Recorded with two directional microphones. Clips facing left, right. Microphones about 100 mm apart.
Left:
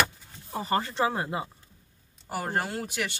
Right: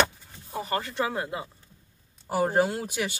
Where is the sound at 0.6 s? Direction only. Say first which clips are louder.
Left 2 dB; 30° left (ahead or behind).